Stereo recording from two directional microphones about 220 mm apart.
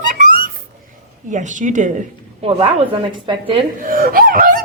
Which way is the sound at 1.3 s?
35° right (ahead or behind).